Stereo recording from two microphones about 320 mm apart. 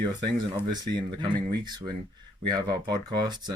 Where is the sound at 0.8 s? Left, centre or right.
Centre.